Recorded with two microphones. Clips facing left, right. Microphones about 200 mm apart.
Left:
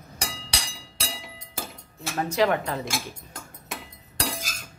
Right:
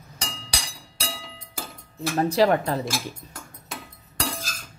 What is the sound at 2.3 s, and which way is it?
Speech, 35° right (ahead or behind).